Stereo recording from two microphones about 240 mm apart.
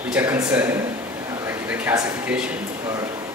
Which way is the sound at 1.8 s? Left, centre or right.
Centre.